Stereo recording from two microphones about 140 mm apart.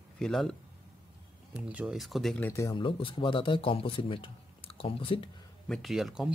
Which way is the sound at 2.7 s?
40° left (ahead or behind).